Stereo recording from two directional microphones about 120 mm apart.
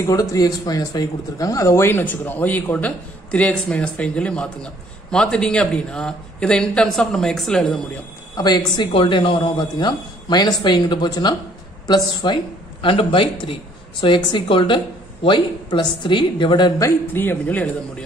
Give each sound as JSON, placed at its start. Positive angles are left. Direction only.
{"t": 0.0, "sound": "speech", "side_deg": 25}
{"t": 8.4, "sound": "a man's voice", "side_deg": 35}
{"t": 8.9, "sound": "a man's voice", "side_deg": 45}
{"t": 17.1, "sound": "speech", "side_deg": 15}